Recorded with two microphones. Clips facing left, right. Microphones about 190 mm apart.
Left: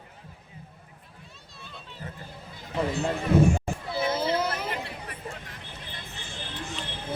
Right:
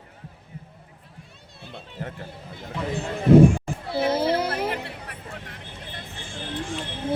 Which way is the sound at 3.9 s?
55° right (ahead or behind).